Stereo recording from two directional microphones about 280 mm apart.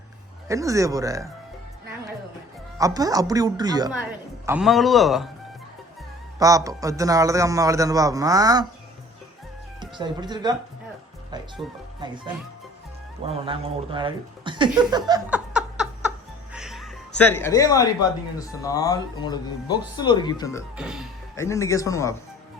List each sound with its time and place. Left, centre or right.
0.4 s a man's voice: centre
2.7 s a man's voice: centre
4.4 s speech: centre
6.4 s a man's voice: centre
9.8 s a man's voice: centre
11.6 s speech: centre
11.9 s a man's voice: centre
16.5 s music: centre
18.3 s speech: centre
20.7 s speech: centre
21.3 s speech: centre